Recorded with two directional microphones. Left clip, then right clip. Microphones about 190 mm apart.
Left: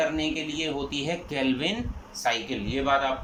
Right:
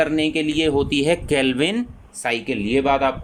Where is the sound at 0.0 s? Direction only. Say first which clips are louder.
Right 7 dB; 60° right (ahead or behind).